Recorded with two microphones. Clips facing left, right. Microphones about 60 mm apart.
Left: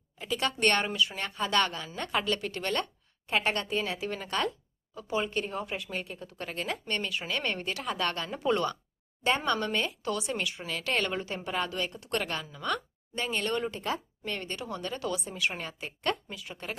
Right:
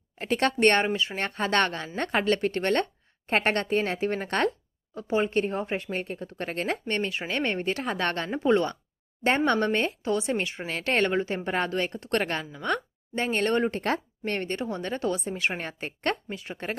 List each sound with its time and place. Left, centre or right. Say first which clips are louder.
0.2 s speech: right 6 dB; right
0.6 s speech: right 3 dB; right
1.2 s speech: right 5 dB; right
13.7 s speech: right 5 dB; right